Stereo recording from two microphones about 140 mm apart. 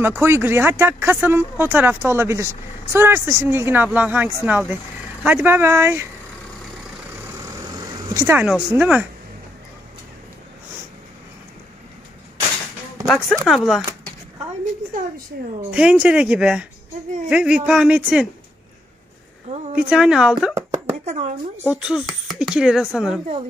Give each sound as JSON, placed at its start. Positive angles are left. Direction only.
{"t": 0.0, "sound": "speech", "side_deg": -15}
{"t": 8.1, "sound": "speech", "side_deg": -20}
{"t": 8.4, "sound": "speech", "side_deg": -10}
{"t": 13.0, "sound": "speech", "side_deg": 5}
{"t": 15.7, "sound": "speech", "side_deg": -10}
{"t": 19.5, "sound": "speech", "side_deg": -50}
{"t": 19.9, "sound": "speech", "side_deg": -5}
{"t": 21.0, "sound": "speech", "side_deg": -55}
{"t": 21.6, "sound": "speech", "side_deg": -5}